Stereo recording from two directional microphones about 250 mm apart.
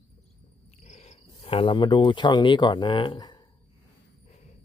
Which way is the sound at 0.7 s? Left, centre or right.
Left.